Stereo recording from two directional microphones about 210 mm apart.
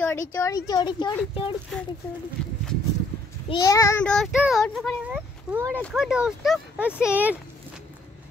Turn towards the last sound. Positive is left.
turn(degrees=-5)  # may be behind; listen again after turning